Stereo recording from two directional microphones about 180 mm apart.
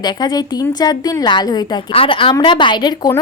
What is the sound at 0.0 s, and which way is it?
A woman's voice, 25° left (ahead or behind).